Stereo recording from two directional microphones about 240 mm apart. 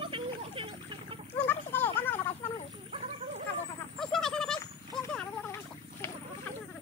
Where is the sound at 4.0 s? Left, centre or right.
Centre.